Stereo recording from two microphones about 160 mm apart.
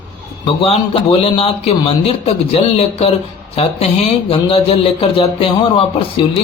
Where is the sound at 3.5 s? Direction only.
40° left (ahead or behind).